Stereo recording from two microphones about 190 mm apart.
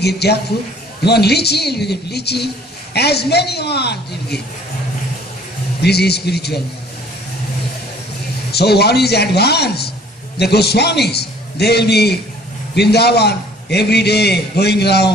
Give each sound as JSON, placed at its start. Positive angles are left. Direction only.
{"t": 0.0, "sound": "a woman's voice", "side_deg": 60}
{"t": 5.8, "sound": "a woman's voice", "side_deg": 60}
{"t": 8.5, "sound": "a woman's voice", "side_deg": 60}